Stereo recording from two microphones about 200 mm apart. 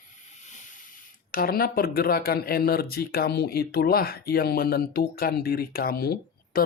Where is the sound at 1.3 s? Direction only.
45° left (ahead or behind).